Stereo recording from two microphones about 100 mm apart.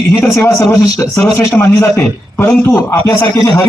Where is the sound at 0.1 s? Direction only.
30° left (ahead or behind).